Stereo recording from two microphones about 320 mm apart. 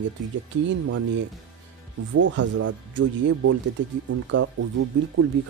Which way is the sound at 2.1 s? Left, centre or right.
Right.